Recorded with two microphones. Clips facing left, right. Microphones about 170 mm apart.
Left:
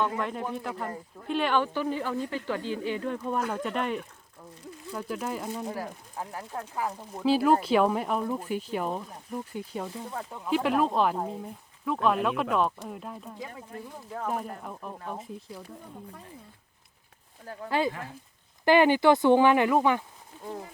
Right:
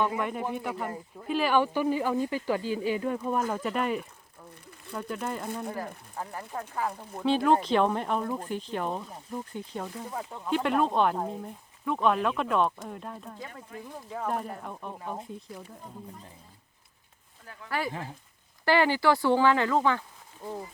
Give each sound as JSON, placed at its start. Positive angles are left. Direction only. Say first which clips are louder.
{"t": 0.0, "sound": "speech", "louder": "right 1 dB", "side_deg": -5}
{"t": 17.4, "sound": "speech", "louder": "left 8 dB", "side_deg": 40}
{"t": 17.7, "sound": "speech", "louder": "left 4 dB", "side_deg": 20}